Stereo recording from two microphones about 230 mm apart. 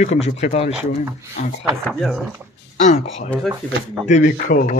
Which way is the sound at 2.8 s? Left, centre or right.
Left.